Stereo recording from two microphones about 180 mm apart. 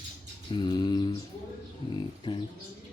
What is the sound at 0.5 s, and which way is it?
Mantra, 25° left (ahead or behind).